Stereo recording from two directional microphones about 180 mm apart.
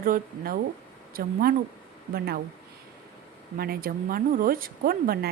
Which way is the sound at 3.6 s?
55° right (ahead or behind).